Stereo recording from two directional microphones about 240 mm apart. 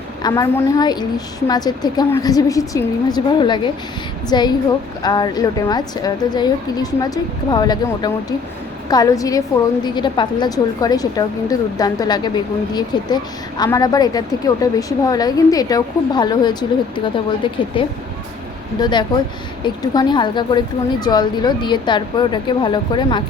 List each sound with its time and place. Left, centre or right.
0.2 s a woman's voice: centre
18.8 s a woman's voice: centre